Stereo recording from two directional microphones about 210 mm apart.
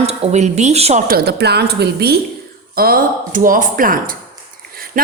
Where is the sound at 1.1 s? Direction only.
50° right (ahead or behind).